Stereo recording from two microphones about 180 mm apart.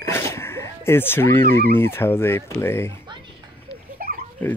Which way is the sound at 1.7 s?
15° left (ahead or behind).